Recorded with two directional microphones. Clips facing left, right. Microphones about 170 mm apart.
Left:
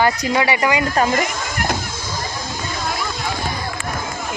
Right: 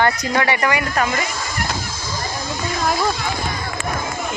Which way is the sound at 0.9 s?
30° left (ahead or behind).